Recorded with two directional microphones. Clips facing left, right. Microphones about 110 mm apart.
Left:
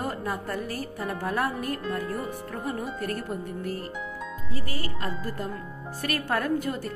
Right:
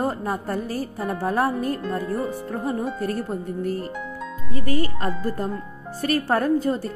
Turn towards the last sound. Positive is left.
turn(degrees=-35)  # may be behind; listen again after turning